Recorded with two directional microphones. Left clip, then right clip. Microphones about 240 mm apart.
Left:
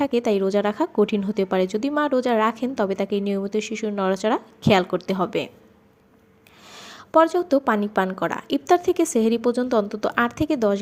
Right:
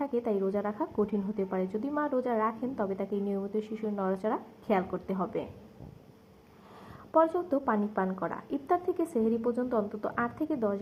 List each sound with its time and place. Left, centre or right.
0.0 s a woman's voice: left
1.6 s a woman's voice: left
6.7 s a woman's voice: left